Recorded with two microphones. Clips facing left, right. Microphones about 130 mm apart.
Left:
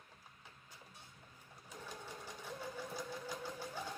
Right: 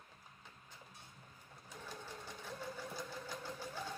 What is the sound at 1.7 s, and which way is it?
Sewing machine, 15° left (ahead or behind).